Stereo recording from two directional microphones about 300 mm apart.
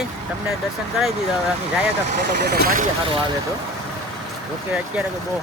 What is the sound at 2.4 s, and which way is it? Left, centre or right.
Speech, right.